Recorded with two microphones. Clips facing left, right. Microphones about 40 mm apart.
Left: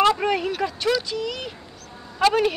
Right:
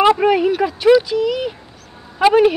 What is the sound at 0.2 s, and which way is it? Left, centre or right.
Speech, centre.